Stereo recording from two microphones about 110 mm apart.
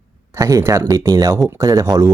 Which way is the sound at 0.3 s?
30° right (ahead or behind).